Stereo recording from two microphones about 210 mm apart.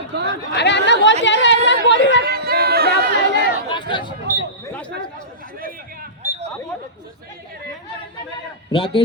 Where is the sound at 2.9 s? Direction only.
55° left (ahead or behind).